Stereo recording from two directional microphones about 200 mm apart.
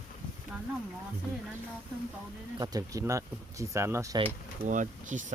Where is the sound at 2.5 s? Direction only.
20° right (ahead or behind).